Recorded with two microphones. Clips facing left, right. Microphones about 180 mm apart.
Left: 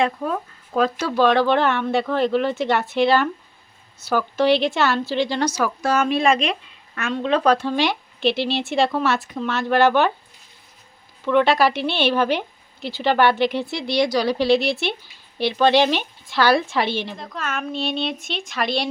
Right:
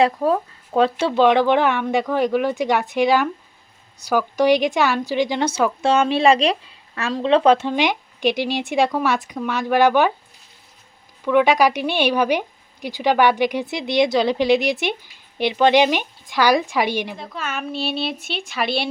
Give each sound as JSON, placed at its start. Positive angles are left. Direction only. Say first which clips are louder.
{"t": 0.0, "sound": "speech", "louder": "right 5 dB", "side_deg": -30}
{"t": 11.3, "sound": "speech", "louder": "right 1 dB", "side_deg": -10}
{"t": 17.2, "sound": "a woman's voice", "louder": "even", "side_deg": -5}